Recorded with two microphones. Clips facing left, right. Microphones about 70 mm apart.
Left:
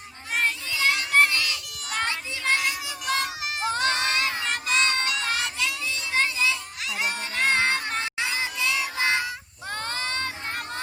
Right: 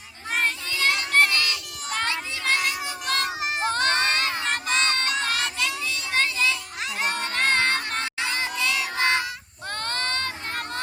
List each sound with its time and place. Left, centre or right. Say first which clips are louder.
0.4 s child singing: left 1 dB; centre
2.0 s crowd: even; centre
2.6 s child singing: even; centre
3.2 s crowd: right 3 dB; right
5.2 s a sound: right 1 dB; centre
7.0 s crowd: right 1 dB; centre
8.7 s child singing: right 2 dB; centre
9.8 s child singing: right 2 dB; centre